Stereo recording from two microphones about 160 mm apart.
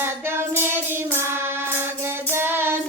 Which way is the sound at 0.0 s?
15° right (ahead or behind).